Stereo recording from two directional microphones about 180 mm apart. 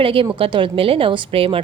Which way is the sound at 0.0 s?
30° right (ahead or behind).